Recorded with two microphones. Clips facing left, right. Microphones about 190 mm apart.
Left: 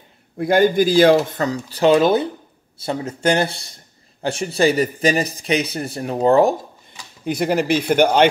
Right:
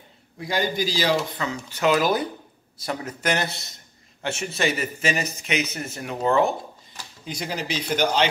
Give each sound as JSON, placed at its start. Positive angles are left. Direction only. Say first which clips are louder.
{"t": 0.4, "sound": "a man's voice", "louder": "left 10 dB", "side_deg": 55}
{"t": 7.2, "sound": "speech", "louder": "left 12 dB", "side_deg": 55}